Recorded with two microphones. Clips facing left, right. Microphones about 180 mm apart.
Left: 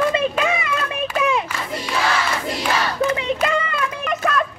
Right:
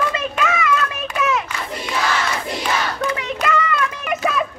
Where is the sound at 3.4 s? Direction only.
25° left (ahead or behind).